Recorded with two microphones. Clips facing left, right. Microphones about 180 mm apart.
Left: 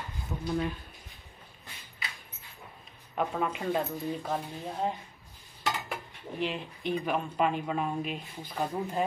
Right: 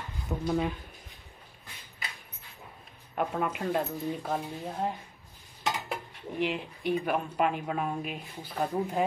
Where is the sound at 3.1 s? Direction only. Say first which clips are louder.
Even; 5° right (ahead or behind).